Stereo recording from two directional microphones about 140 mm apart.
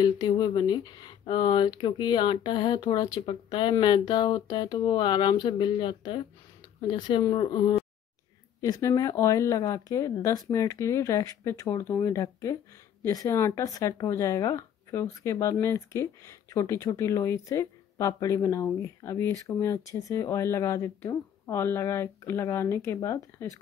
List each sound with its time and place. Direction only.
0.0 s speech: 30° left (ahead or behind)